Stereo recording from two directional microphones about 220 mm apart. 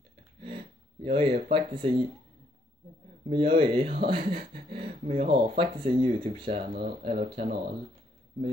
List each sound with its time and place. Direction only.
1.0 s speech: 25° right (ahead or behind)
3.3 s speech: 25° right (ahead or behind)